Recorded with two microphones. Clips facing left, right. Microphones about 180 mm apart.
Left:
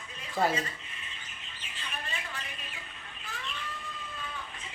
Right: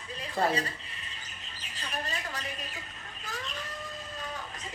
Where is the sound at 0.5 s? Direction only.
35° right (ahead or behind).